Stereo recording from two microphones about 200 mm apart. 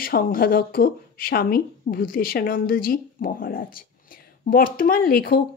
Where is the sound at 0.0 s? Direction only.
45° left (ahead or behind).